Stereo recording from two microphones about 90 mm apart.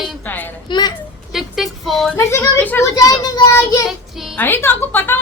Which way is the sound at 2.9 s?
45° left (ahead or behind).